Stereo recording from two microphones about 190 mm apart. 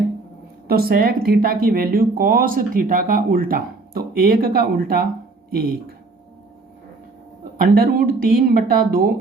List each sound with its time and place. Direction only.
0.7 s speech: 50° right (ahead or behind)
7.6 s speech: 50° right (ahead or behind)